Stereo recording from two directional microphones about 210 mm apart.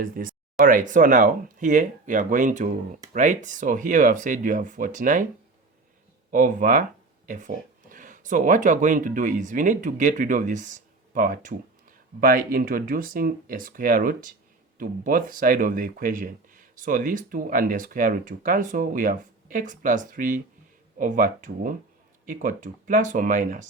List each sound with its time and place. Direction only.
0.0 s speech: 40° right (ahead or behind)
6.3 s speech: 40° right (ahead or behind)